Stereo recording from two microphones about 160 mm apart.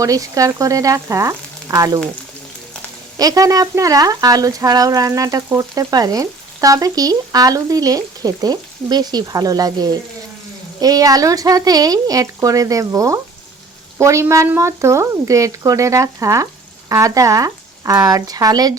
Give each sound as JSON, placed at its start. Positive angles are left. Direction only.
{"t": 0.0, "sound": "speech", "side_deg": -20}
{"t": 3.2, "sound": "speech", "side_deg": -20}